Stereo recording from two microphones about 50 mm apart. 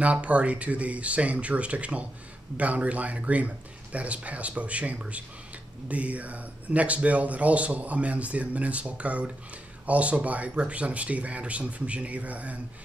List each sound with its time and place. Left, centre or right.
0.0 s speech: right